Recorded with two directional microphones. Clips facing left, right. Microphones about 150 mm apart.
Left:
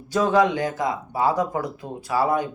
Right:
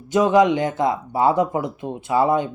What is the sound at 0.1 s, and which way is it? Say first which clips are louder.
Speech: right 4 dB; 20° right (ahead or behind).